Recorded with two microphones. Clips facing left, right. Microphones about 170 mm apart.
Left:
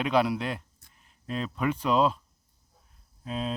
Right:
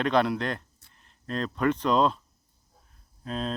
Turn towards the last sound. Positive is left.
turn(degrees=5)  # may be behind; listen again after turning